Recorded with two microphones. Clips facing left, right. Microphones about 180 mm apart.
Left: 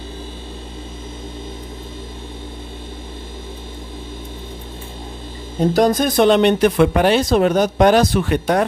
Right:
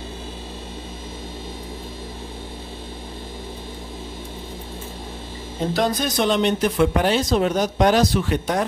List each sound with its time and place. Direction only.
5.7 s speech: 45° left (ahead or behind)